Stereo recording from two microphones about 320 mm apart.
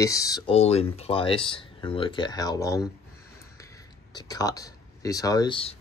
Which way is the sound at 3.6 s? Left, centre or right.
Centre.